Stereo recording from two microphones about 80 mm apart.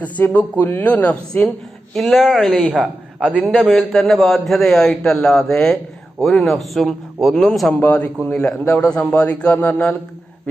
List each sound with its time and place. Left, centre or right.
0.0 s a man's voice: centre
1.9 s a man's voice: centre
2.6 s a man's voice: centre
3.5 s a man's voice: centre
7.7 s a man's voice: centre